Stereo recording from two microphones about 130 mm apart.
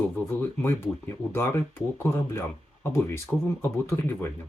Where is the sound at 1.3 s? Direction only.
20° left (ahead or behind).